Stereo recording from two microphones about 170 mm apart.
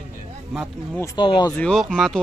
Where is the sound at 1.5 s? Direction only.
5° left (ahead or behind).